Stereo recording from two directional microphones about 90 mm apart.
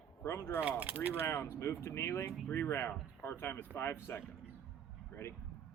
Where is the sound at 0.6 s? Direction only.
15° right (ahead or behind).